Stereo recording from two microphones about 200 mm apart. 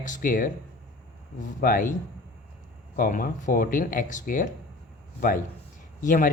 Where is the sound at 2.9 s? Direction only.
40° left (ahead or behind).